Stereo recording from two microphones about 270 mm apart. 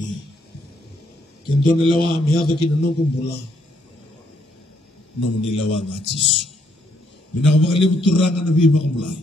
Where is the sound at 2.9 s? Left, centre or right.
Left.